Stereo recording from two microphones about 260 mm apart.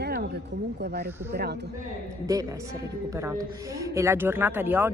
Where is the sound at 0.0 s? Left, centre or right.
Right.